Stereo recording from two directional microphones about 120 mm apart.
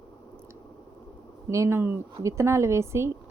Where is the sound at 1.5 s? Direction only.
25° right (ahead or behind).